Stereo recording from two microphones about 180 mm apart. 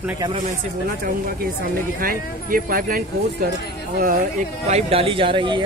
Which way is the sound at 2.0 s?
50° right (ahead or behind).